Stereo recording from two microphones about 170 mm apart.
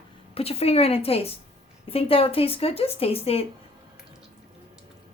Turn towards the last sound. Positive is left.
turn(degrees=35)  # may be behind; listen again after turning